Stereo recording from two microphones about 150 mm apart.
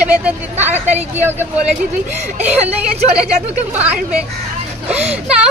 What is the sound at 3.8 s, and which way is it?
Speech, 10° right (ahead or behind).